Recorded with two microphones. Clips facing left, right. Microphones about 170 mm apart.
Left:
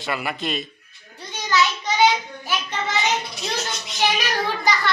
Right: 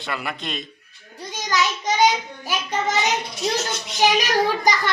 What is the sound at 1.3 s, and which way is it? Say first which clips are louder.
Child singing: left 2 dB; 40° right (ahead or behind).